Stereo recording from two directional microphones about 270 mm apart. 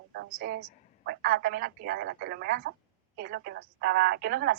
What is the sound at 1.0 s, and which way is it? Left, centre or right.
A woman's voice, right.